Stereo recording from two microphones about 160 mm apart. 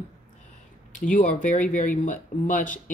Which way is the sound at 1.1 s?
50° left (ahead or behind).